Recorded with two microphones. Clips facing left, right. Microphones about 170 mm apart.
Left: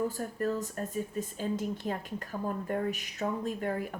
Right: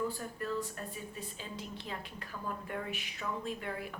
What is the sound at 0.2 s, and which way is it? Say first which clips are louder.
Speech: left 5 dB; 45° left (ahead or behind).